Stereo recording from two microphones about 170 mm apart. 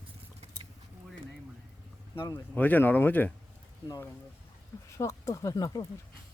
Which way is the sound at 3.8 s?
20° left (ahead or behind).